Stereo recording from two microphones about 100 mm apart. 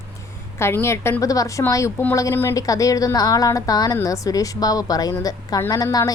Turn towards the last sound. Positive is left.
turn(degrees=35)  # may be behind; listen again after turning